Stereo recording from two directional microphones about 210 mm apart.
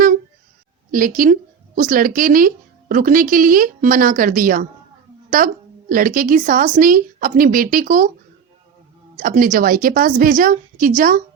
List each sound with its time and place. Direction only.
0.9 s a woman's voice: 40° right (ahead or behind)
5.9 s speech: 40° right (ahead or behind)
9.1 s speech: 40° right (ahead or behind)